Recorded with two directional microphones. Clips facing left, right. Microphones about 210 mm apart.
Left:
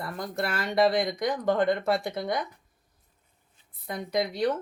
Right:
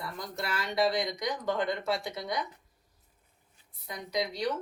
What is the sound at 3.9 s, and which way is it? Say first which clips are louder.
Speech: left 5 dB; 55° left (ahead or behind).